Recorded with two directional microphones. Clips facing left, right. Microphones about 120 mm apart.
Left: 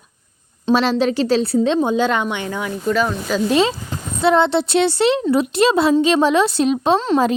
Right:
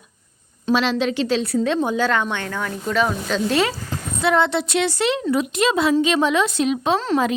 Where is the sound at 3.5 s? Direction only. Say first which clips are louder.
Left 4 dB; 20° left (ahead or behind).